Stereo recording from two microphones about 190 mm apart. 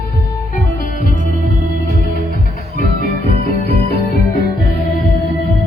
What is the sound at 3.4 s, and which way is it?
Music, 50° left (ahead or behind).